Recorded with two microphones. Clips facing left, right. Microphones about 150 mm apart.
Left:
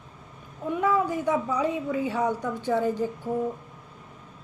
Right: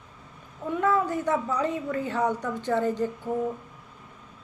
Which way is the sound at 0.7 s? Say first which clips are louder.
Even; 10° left (ahead or behind).